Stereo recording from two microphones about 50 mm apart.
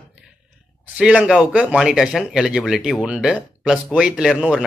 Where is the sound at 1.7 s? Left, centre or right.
Centre.